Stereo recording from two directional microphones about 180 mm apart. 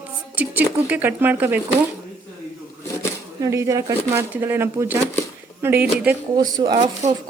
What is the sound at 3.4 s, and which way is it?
Speech, 15° right (ahead or behind).